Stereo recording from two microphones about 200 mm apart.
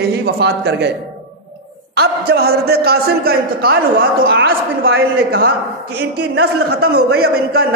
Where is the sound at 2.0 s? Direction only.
50° right (ahead or behind).